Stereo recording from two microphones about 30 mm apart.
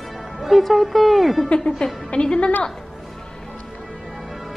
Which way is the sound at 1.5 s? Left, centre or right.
Left.